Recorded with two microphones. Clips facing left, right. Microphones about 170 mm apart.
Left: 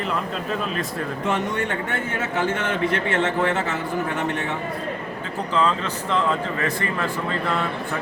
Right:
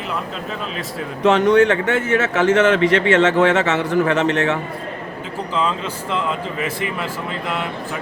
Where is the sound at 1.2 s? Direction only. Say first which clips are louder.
Right 13 dB; 75° right (ahead or behind).